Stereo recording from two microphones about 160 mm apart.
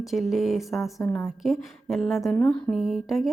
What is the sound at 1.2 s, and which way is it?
A woman's voice, centre (ahead or behind).